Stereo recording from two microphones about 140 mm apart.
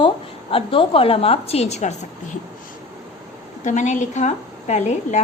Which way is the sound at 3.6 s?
60° left (ahead or behind).